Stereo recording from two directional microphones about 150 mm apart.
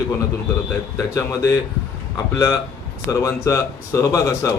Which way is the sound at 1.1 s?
20° left (ahead or behind).